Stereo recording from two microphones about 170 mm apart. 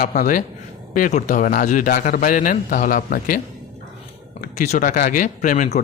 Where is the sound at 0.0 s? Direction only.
50° left (ahead or behind).